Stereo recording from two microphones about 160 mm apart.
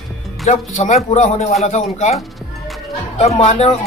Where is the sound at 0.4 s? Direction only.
50° left (ahead or behind).